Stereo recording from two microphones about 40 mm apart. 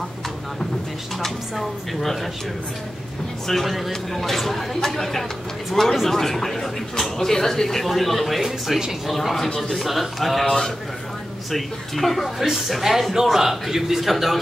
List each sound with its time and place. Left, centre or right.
1.2 s speech: centre
3.4 s speech: centre
9.1 s speech: centre
10.4 s speech: centre
11.5 s speech: centre